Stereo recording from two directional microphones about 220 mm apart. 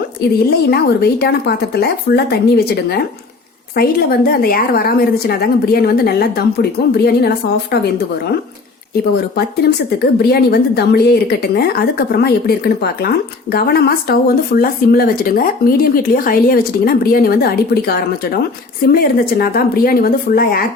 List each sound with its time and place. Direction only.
0.7 s speech: 45° left (ahead or behind)
9.3 s speech: 45° left (ahead or behind)